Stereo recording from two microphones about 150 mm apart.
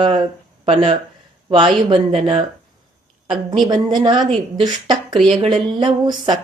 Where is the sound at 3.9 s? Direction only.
35° right (ahead or behind).